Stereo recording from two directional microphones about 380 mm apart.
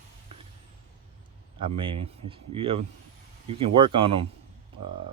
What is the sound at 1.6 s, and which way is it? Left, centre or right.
Speech, centre.